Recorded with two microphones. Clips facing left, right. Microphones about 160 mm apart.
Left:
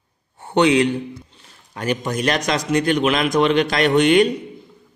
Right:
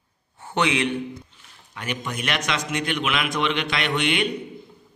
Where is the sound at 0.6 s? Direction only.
35° left (ahead or behind).